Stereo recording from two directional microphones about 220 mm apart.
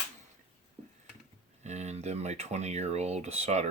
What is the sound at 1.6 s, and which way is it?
Speech, 30° right (ahead or behind).